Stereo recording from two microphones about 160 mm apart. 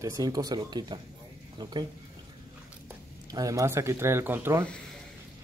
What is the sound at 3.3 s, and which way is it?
A man's voice, 20° right (ahead or behind).